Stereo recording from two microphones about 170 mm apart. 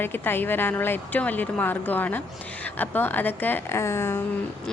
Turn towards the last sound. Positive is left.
turn(degrees=15)  # may be behind; listen again after turning